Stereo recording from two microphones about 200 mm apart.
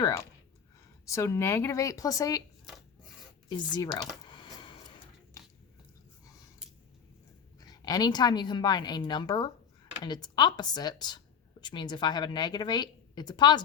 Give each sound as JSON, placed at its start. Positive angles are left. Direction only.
{"t": 1.0, "sound": "speech", "side_deg": 15}
{"t": 3.5, "sound": "a woman's voice", "side_deg": 20}
{"t": 4.3, "sound": "a sound", "side_deg": 20}
{"t": 5.4, "sound": "squish", "side_deg": 15}
{"t": 7.6, "sound": "a woman's voice", "side_deg": 20}